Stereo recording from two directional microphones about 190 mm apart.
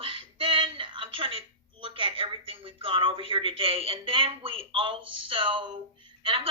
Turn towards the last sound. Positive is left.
turn(degrees=-30)  # may be behind; listen again after turning